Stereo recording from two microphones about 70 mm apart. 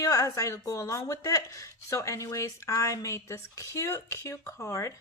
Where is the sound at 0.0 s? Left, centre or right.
Left.